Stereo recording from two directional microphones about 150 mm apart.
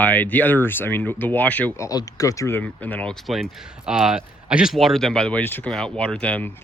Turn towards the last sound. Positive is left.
turn(degrees=5)  # may be behind; listen again after turning